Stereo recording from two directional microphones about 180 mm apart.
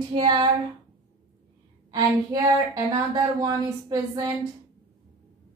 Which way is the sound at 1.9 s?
20° right (ahead or behind).